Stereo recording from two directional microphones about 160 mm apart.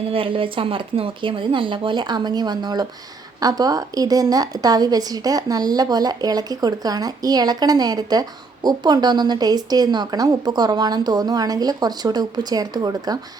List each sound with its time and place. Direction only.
0.1 s a woman's voice: 35° right (ahead or behind)